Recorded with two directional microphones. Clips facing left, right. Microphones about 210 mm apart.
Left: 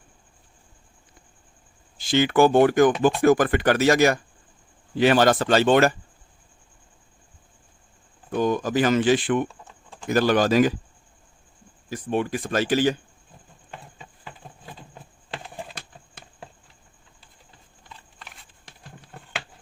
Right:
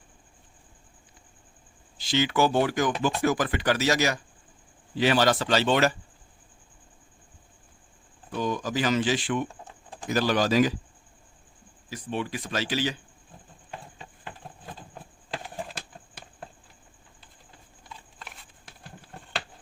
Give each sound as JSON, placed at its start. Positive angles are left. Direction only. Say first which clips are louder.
{"t": 2.0, "sound": "speech", "louder": "left 6 dB", "side_deg": 55}
{"t": 8.3, "sound": "speech", "louder": "left 6 dB", "side_deg": 50}
{"t": 9.5, "sound": "typing", "louder": "right 2 dB", "side_deg": -15}
{"t": 10.1, "sound": "speech", "louder": "left 5 dB", "side_deg": 55}
{"t": 11.9, "sound": "speech", "louder": "left 6 dB", "side_deg": 50}